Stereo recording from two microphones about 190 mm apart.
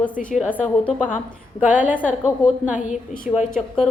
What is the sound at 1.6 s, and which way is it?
A woman's voice, 10° right (ahead or behind).